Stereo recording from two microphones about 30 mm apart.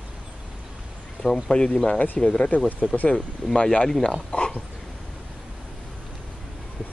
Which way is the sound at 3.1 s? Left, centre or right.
Centre.